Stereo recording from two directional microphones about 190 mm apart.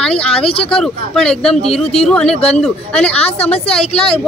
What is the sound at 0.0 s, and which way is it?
Speech, 5° left (ahead or behind).